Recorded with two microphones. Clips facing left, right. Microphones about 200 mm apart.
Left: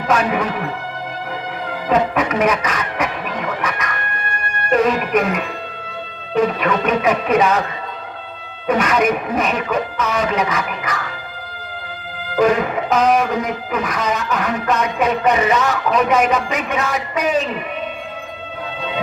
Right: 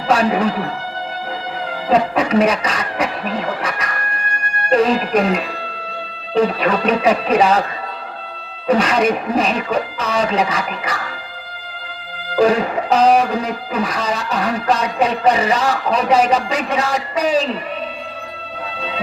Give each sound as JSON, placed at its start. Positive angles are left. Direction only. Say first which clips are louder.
{"t": 0.1, "sound": "speech", "louder": "right 3 dB", "side_deg": -30}
{"t": 1.9, "sound": "speech", "louder": "right 2 dB", "side_deg": -30}
{"t": 8.6, "sound": "speech", "louder": "right 1 dB", "side_deg": -30}
{"t": 12.4, "sound": "speech", "louder": "right 1 dB", "side_deg": -30}